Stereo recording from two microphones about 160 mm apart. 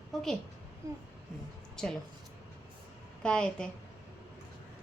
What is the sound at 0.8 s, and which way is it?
Speech, 20° right (ahead or behind).